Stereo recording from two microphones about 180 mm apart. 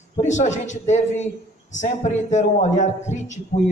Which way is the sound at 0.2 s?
40° left (ahead or behind).